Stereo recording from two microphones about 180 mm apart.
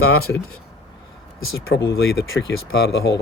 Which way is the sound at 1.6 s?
85° left.